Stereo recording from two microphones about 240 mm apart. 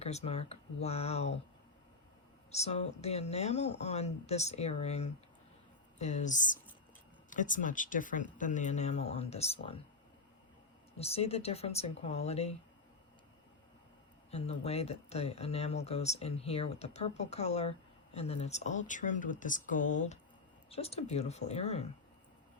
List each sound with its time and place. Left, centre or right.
0.0 s speech: left
2.5 s speech: left
10.9 s speech: left
14.3 s speech: left